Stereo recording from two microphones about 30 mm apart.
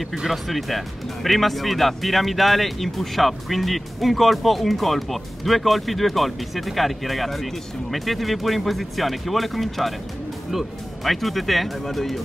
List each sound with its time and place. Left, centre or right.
0.3 s speech: centre
11.1 s speech: centre